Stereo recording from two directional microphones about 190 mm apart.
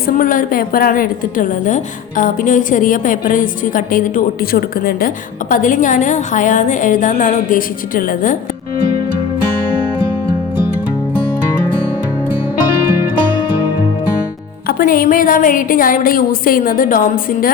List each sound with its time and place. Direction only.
0.2 s a woman's voice: 45° left (ahead or behind)
14.7 s a woman's voice: 45° left (ahead or behind)